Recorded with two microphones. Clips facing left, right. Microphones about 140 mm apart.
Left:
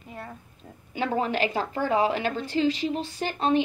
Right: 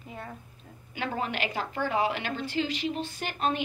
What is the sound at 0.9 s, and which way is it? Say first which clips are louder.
A woman's voice: left 6 dB; 35° left (ahead or behind).